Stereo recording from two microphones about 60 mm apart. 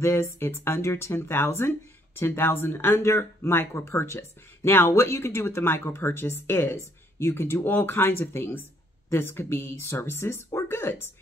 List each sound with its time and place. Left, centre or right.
0.0 s speech: left